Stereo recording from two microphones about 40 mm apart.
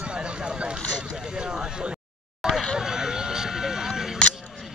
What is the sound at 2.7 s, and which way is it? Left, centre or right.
Vehicle, centre.